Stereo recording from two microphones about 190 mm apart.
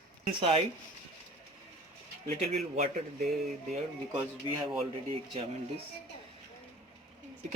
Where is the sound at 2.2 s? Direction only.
35° right (ahead or behind).